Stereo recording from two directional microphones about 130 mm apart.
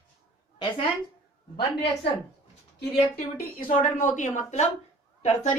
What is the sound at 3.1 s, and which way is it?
A woman's voice, 80° left.